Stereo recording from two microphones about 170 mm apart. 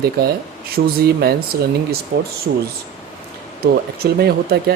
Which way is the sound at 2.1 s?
45° right (ahead or behind).